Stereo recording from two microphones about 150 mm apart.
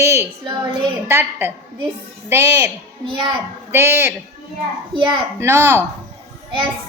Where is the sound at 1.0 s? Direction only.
15° right (ahead or behind).